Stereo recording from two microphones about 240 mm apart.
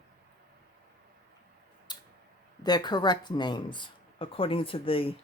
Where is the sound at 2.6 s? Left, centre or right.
Centre.